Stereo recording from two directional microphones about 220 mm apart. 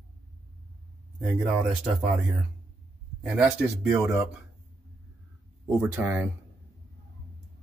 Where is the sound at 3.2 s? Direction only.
5° right (ahead or behind).